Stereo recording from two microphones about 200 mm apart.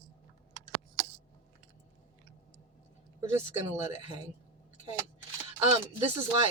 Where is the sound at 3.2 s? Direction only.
15° right (ahead or behind).